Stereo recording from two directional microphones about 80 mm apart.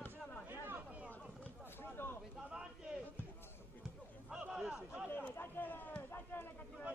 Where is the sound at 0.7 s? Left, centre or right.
Centre.